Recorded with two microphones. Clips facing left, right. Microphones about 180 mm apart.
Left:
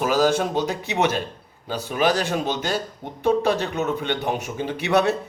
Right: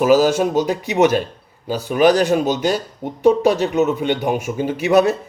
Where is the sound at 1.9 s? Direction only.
50° right (ahead or behind).